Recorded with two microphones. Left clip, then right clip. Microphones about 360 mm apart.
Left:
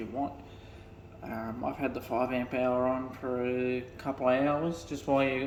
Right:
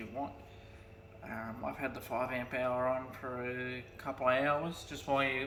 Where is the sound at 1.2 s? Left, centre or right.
Centre.